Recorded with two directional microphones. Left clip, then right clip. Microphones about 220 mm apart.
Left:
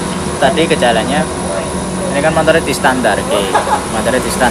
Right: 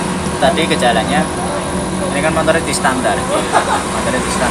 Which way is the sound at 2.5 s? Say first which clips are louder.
Left 3 dB; 30° left (ahead or behind).